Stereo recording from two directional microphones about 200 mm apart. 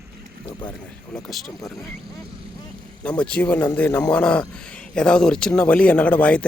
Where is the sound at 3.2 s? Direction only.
5° left (ahead or behind).